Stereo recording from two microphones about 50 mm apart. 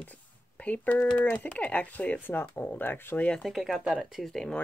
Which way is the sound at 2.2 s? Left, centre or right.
Left.